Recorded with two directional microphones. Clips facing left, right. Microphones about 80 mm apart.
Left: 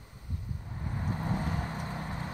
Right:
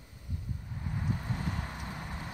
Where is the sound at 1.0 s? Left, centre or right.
Left.